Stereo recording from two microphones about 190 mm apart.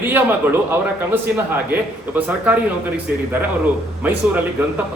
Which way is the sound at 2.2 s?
10° right (ahead or behind).